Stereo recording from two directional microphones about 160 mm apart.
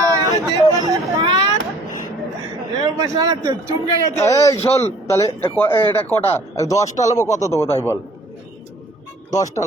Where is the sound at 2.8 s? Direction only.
25° right (ahead or behind).